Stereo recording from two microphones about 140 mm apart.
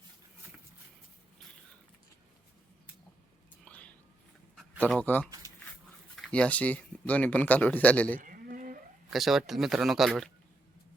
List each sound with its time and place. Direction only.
3.6 s whispering: 10° left (ahead or behind)
4.9 s a man's voice: 10° left (ahead or behind)
8.2 s a sound: 80° right
9.0 s speech: centre (ahead or behind)